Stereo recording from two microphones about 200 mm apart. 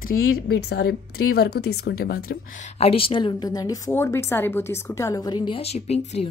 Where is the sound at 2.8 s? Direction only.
30° left (ahead or behind).